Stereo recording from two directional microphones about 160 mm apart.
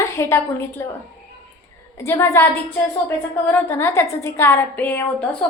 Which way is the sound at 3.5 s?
10° left (ahead or behind).